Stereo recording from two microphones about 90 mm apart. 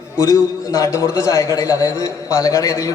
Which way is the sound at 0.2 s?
40° left (ahead or behind).